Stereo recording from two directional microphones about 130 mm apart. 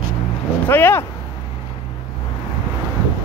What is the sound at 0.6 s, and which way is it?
Speech, 15° left (ahead or behind).